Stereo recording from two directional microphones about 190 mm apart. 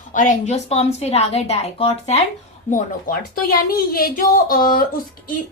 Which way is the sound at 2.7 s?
50° left (ahead or behind).